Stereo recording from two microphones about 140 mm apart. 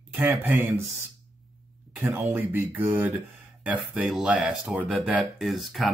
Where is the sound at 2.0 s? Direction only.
15° right (ahead or behind).